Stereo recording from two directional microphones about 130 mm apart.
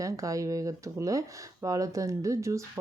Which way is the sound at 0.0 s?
25° right (ahead or behind).